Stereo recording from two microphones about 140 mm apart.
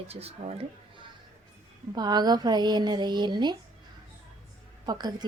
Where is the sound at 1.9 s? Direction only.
30° right (ahead or behind).